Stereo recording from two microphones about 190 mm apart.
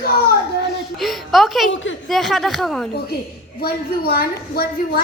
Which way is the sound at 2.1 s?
Centre (ahead or behind).